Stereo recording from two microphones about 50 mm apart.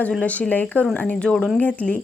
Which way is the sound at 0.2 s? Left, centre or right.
Left.